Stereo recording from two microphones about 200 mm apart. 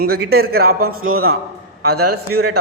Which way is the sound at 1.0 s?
90° right.